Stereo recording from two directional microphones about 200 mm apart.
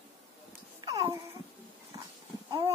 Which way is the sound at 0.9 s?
20° right (ahead or behind).